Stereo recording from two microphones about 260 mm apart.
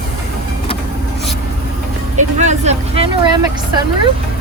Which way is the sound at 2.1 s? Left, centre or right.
Right.